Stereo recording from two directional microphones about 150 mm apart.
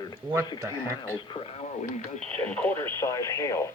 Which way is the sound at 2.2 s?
10° left (ahead or behind).